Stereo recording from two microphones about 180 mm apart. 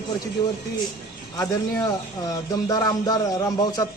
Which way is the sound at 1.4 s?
20° left (ahead or behind).